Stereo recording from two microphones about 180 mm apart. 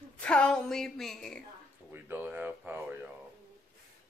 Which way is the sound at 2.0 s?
10° right (ahead or behind).